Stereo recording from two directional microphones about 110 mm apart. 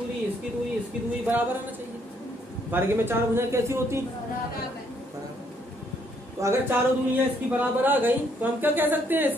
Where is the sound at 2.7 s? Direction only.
20° right (ahead or behind).